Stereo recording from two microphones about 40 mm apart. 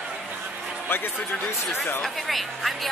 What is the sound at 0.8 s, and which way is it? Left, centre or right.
Speech, left.